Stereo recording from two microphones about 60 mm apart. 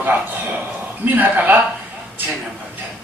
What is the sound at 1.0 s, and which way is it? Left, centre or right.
Speech, right.